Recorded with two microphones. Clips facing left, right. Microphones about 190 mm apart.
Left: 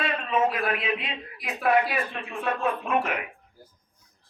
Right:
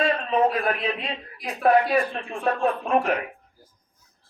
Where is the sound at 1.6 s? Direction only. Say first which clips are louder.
Right 4 dB; 35° right (ahead or behind).